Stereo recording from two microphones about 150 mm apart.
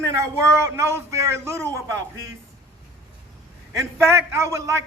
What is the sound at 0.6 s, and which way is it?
A man's voice, 20° right (ahead or behind).